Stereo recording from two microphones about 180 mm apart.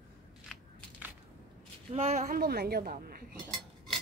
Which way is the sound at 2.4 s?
60° right (ahead or behind).